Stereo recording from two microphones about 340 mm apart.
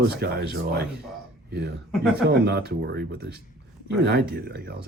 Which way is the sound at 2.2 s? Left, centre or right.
Right.